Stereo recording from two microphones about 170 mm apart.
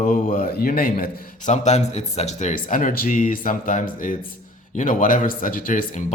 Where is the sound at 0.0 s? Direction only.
55° left (ahead or behind).